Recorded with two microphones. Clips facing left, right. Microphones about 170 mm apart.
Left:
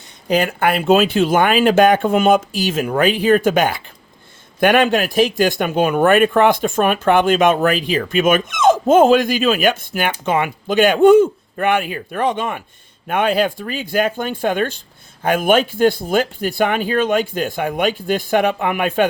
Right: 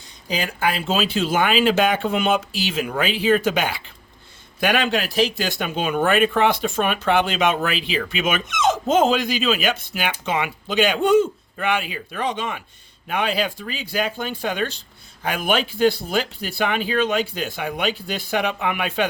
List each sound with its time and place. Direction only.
0.3 s speech: 60° left (ahead or behind)